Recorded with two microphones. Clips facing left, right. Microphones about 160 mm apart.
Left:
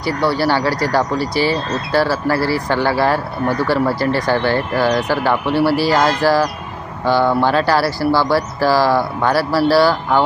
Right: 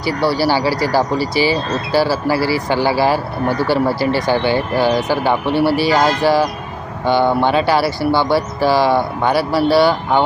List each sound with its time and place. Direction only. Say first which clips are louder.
0.1 s speech: right 1 dB; 30° right (ahead or behind)
0.3 s speech: right 1 dB; 5° right (ahead or behind)
3.5 s speech: right 1 dB; 30° right (ahead or behind)
3.8 s speech: right 1 dB; centre (ahead or behind)
7.0 s speech: even; 25° right (ahead or behind)
7.5 s speech: right 1 dB; centre (ahead or behind)
8.1 s speech: even; 25° right (ahead or behind)
8.4 s speech: right 1 dB; centre (ahead or behind)
9.7 s speech: right 1 dB; 25° right (ahead or behind)